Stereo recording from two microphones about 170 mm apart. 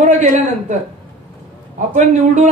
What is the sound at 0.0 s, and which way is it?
Speech, 45° right (ahead or behind).